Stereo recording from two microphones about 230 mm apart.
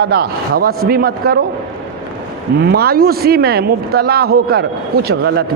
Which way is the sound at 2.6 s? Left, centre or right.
Right.